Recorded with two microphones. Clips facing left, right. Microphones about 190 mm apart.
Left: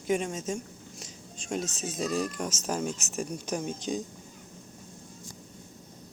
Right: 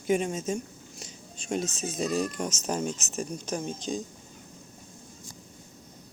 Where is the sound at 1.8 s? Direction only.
5° left (ahead or behind).